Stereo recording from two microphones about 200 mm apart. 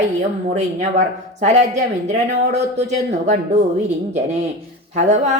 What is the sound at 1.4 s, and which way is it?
Speech, 35° right (ahead or behind).